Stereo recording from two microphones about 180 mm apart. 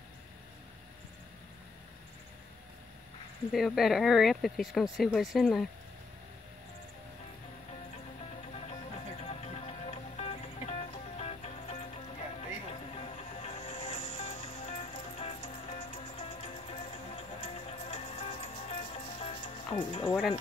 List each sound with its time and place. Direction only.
3.5 s speech: centre (ahead or behind)
8.5 s music: 35° left (ahead or behind)
12.9 s music: 35° left (ahead or behind)